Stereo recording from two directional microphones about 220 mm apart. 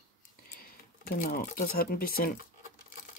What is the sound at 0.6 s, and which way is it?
Speech, 40° left (ahead or behind).